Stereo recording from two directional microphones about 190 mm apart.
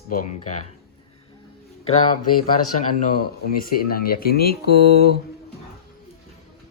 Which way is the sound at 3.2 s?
50° left (ahead or behind).